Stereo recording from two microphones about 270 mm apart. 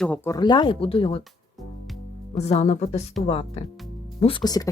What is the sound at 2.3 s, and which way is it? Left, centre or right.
Speech, left.